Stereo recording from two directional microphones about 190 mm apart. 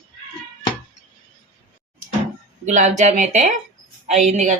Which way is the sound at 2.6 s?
40° right (ahead or behind).